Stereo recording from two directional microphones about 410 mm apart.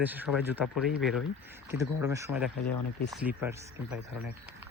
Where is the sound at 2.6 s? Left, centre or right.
Left.